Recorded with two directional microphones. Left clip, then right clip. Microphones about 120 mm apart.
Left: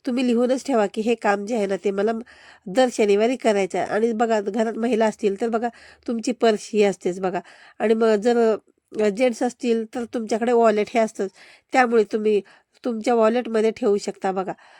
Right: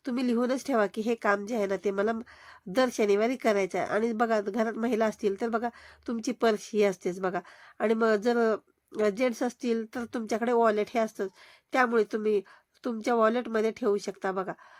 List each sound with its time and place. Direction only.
0.0 s a woman's voice: 55° left (ahead or behind)